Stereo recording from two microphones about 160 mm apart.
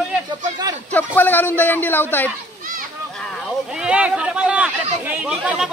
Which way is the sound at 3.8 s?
5° right (ahead or behind).